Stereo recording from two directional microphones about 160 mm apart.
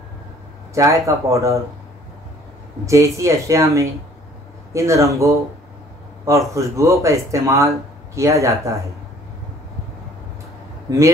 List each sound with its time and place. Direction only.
0.7 s speech: 20° right (ahead or behind)
2.8 s speech: 20° right (ahead or behind)